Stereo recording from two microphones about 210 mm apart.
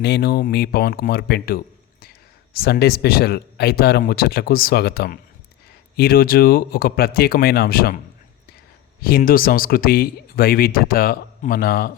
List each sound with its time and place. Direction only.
0.0 s speech: 50° left (ahead or behind)